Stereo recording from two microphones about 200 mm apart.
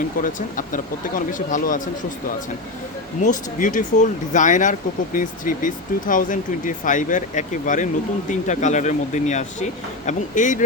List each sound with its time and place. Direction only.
0.2 s speech: 40° left (ahead or behind)
3.2 s speech: 40° left (ahead or behind)